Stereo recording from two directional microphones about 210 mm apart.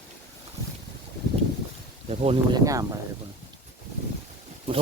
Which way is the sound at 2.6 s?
15° right (ahead or behind).